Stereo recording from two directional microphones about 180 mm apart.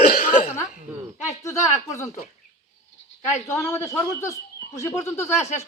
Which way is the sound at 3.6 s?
15° left (ahead or behind).